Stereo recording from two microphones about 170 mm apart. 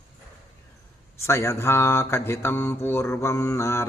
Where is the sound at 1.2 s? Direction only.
15° left (ahead or behind).